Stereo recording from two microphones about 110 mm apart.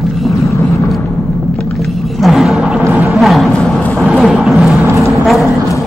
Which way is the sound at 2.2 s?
Centre (ahead or behind).